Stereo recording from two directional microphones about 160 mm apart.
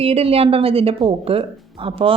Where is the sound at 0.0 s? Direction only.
40° right (ahead or behind).